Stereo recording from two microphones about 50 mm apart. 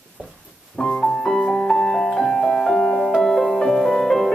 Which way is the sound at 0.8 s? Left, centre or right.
Centre.